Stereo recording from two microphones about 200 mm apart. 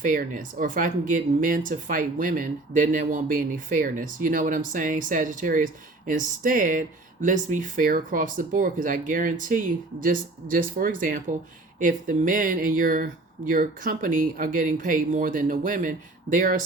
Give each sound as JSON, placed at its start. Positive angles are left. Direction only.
{"t": 0.0, "sound": "speech", "side_deg": -40}